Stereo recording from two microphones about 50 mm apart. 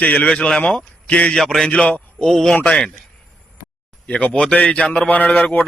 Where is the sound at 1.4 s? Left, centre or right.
Centre.